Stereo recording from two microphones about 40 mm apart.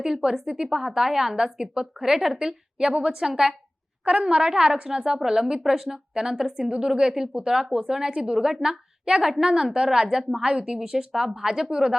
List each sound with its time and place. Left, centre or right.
0.0 s a woman's voice: centre
1.5 s a woman's voice: right
4.0 s a woman's voice: right